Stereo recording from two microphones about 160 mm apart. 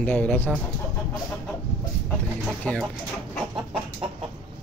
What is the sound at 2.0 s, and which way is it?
Chicken, 10° left (ahead or behind).